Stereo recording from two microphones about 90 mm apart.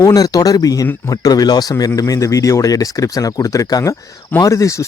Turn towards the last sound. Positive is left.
turn(degrees=35)  # may be behind; listen again after turning